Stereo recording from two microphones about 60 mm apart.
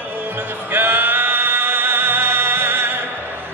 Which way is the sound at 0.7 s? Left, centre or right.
Right.